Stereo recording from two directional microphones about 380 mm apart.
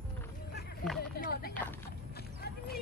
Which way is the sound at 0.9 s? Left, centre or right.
Left.